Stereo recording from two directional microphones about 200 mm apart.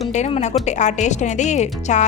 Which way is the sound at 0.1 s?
35° left (ahead or behind).